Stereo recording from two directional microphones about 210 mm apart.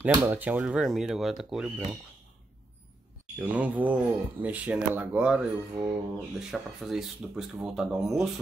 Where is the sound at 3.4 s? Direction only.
5° right (ahead or behind).